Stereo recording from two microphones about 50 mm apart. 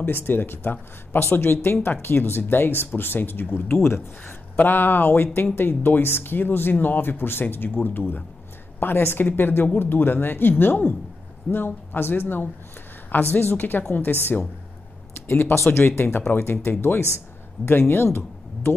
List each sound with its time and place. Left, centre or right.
0.0 s a woman's voice: left
15.1 s speech: left